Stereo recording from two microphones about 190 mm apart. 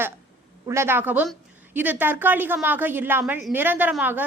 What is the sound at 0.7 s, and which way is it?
A woman's voice, 15° right (ahead or behind).